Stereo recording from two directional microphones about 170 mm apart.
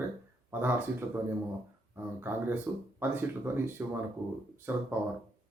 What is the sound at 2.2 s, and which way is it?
Speech, 15° right (ahead or behind).